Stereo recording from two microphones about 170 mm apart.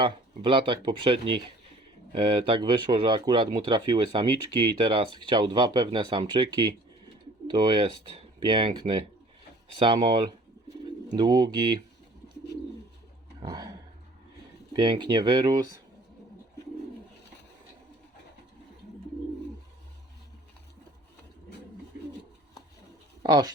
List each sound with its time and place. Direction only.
0.0 s speech: 30° right (ahead or behind)
13.4 s speech: 25° right (ahead or behind)
14.8 s speech: 30° right (ahead or behind)
23.2 s speech: 25° right (ahead or behind)